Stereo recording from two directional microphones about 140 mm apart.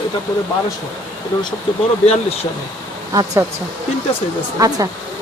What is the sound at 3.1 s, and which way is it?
Speech, 25° right (ahead or behind).